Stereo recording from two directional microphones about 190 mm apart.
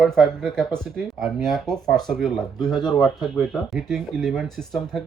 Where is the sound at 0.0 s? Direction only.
Centre (ahead or behind).